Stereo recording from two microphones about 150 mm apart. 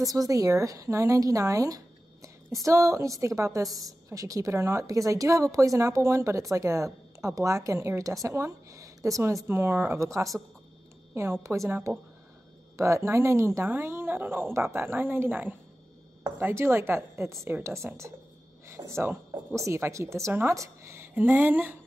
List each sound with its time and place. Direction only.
0.0 s a woman's voice: 25° right (ahead or behind)
11.4 s a woman's voice: 20° right (ahead or behind)